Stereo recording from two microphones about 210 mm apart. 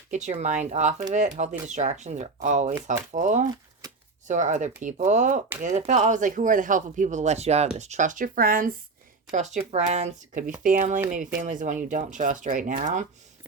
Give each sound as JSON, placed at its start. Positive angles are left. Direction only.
{"t": 0.1, "sound": "speech", "side_deg": -35}